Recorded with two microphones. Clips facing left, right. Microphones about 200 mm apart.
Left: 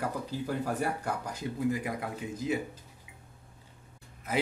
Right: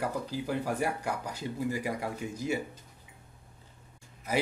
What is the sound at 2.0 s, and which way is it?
Speech, centre (ahead or behind).